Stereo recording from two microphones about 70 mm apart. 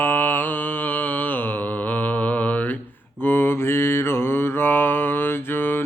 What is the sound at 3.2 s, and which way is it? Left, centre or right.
Mantra, left.